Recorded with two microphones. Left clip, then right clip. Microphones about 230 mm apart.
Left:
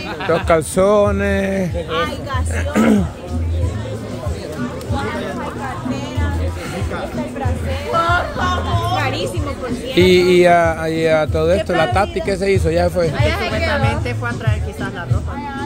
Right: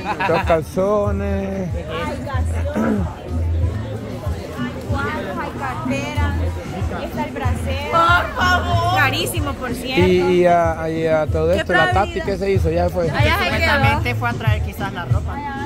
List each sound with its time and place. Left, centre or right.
0.5 s speech: left
2.7 s speech: left
7.9 s music: right
10.0 s speech: centre
13.1 s music: right